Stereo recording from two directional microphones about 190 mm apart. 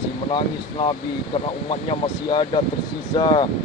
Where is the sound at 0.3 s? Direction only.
25° left (ahead or behind).